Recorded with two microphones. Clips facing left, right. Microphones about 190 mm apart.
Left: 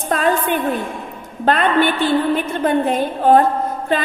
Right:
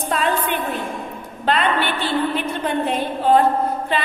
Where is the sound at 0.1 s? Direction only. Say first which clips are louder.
Left 5 dB; 50° left (ahead or behind).